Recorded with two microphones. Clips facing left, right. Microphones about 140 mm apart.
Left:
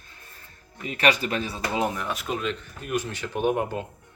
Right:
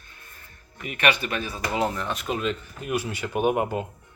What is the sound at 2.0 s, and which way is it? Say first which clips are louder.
Speech: right 1 dB; centre (ahead or behind).